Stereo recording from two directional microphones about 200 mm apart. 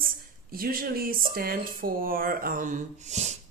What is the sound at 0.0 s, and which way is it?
A woman's voice, 45° right (ahead or behind).